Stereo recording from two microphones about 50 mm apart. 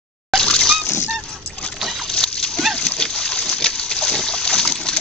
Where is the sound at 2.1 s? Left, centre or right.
Centre.